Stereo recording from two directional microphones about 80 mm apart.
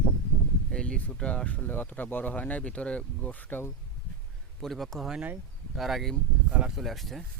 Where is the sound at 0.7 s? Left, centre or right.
Centre.